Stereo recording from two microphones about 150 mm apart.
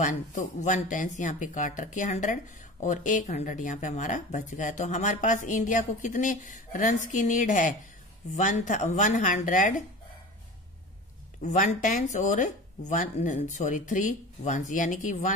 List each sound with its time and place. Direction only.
0.0 s speech: 55° left (ahead or behind)
11.4 s speech: 60° left (ahead or behind)